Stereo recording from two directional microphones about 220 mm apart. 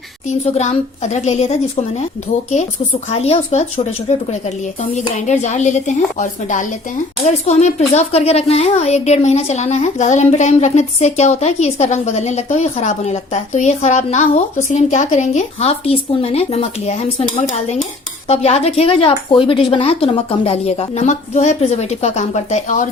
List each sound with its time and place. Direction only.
0.3 s a woman's voice: 30° left (ahead or behind)
3.1 s a woman's voice: 30° left (ahead or behind)